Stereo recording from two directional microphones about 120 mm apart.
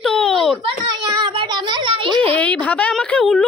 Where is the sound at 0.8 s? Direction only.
35° right (ahead or behind).